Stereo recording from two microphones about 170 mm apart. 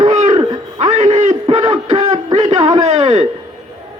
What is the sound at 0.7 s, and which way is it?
A man's voice, 40° right (ahead or behind).